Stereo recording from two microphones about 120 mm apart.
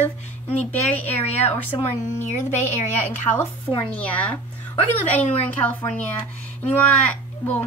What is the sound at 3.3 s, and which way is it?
Speech, 35° left (ahead or behind).